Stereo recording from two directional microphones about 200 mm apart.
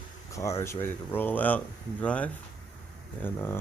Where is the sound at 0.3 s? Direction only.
15° left (ahead or behind).